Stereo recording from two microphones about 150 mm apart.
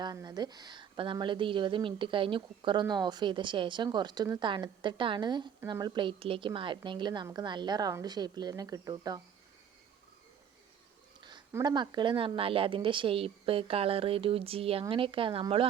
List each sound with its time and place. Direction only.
0.0 s a woman's voice: 25° right (ahead or behind)
11.2 s a sound: 30° right (ahead or behind)
11.5 s a woman's voice: 30° right (ahead or behind)